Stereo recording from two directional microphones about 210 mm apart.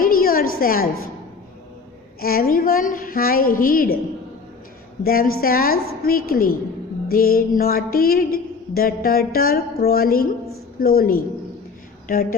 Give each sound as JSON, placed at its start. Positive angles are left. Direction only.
{"t": 0.0, "sound": "a sound", "side_deg": 45}
{"t": 0.6, "sound": "music", "side_deg": 45}
{"t": 2.2, "sound": "music", "side_deg": 45}
{"t": 5.0, "sound": "music", "side_deg": 45}